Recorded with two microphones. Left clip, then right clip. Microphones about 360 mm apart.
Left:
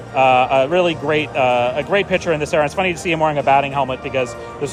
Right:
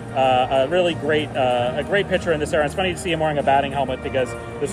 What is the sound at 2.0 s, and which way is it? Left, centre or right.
Speech, centre.